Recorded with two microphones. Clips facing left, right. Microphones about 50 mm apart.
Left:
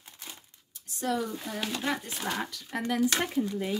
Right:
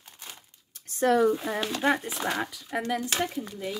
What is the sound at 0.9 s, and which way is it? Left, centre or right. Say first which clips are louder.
Speech: right 9 dB; right.